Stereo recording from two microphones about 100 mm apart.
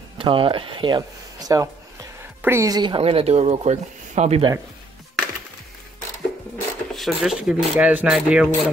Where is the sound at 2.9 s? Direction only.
75° right (ahead or behind); by 3.8 s 90° right.